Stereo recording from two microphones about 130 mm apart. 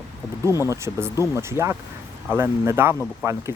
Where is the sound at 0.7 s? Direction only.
20° right (ahead or behind).